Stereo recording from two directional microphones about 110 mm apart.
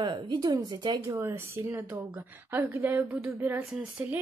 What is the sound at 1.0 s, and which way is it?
A woman's voice, 25° right (ahead or behind).